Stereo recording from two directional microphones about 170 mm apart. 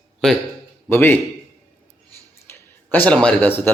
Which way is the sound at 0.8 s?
15° left (ahead or behind).